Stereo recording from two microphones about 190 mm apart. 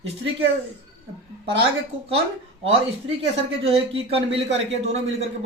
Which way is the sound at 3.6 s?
30° right (ahead or behind).